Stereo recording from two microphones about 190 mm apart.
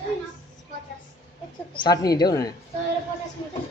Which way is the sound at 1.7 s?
20° left (ahead or behind).